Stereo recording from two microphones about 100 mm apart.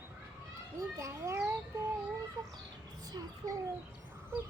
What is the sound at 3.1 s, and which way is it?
Speech, 40° right (ahead or behind).